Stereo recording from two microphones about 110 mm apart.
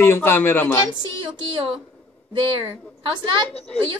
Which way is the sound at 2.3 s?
50° right (ahead or behind).